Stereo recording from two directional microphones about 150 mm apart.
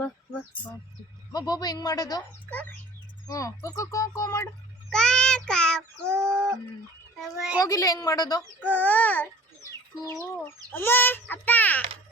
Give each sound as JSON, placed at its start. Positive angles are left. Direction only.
{"t": 1.3, "sound": "speech", "side_deg": 25}
{"t": 2.5, "sound": "speech", "side_deg": 10}
{"t": 3.2, "sound": "speech", "side_deg": 20}
{"t": 4.9, "sound": "child singing", "side_deg": 5}
{"t": 6.1, "sound": "a sound", "side_deg": -20}
{"t": 7.2, "sound": "child singing", "side_deg": -5}
{"t": 7.6, "sound": "speech", "side_deg": 20}
{"t": 8.4, "sound": "speech", "side_deg": 10}
{"t": 10.3, "sound": "speech", "side_deg": 15}